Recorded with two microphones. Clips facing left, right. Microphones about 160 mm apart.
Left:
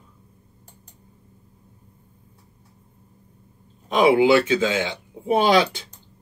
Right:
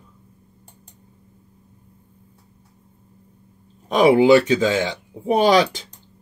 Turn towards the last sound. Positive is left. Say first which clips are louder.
# right 2 dB
turn(degrees=-40)  # may be behind; listen again after turning